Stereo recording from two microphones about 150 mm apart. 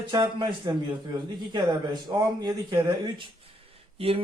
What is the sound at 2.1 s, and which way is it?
A man's voice, 30° right (ahead or behind).